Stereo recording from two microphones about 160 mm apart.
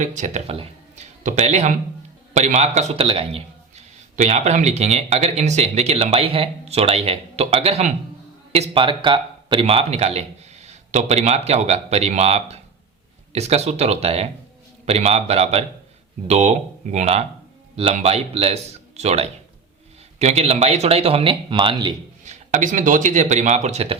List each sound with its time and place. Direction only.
0.0 s a man's voice: 50° right (ahead or behind); by 21.9 s 30° right (ahead or behind)
22.2 s speech: 50° right (ahead or behind)